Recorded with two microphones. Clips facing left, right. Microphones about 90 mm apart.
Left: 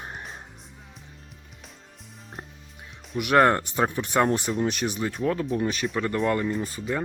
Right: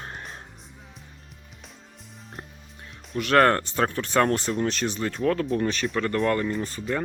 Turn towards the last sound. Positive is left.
turn(degrees=5)  # may be behind; listen again after turning